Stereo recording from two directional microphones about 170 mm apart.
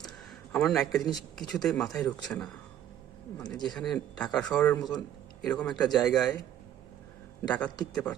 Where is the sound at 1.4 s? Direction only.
Centre (ahead or behind).